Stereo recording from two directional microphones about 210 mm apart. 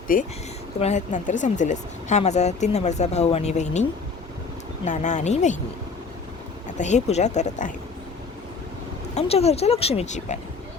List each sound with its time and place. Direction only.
0.1 s speech: 40° left (ahead or behind)
4.9 s speech: 35° left (ahead or behind)
6.7 s speech: 35° left (ahead or behind)
9.1 s speech: 30° left (ahead or behind)